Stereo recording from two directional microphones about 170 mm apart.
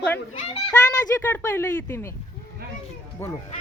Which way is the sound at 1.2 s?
15° left (ahead or behind).